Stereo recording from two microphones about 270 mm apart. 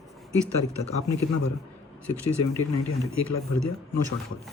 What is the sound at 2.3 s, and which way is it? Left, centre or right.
A man's voice, left.